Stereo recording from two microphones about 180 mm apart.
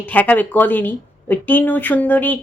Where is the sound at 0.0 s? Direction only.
10° left (ahead or behind).